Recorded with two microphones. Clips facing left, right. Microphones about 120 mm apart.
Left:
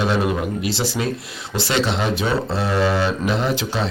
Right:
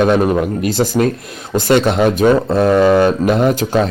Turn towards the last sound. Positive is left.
turn(degrees=-45)  # may be behind; listen again after turning